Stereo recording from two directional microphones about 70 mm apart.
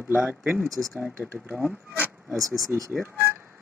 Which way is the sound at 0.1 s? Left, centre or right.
Right.